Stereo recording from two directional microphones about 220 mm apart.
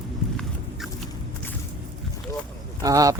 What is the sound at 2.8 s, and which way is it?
Speech, 15° right (ahead or behind).